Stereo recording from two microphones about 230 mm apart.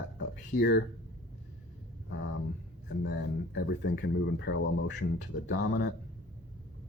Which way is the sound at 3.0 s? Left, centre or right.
Left.